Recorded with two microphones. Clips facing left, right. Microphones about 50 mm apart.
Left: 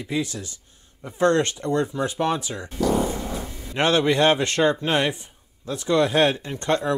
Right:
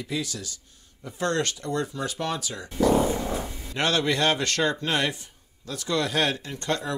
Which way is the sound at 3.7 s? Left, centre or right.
Left.